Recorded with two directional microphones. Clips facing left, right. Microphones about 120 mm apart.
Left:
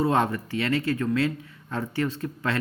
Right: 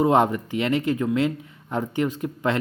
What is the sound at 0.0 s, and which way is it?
Speech, 20° right (ahead or behind).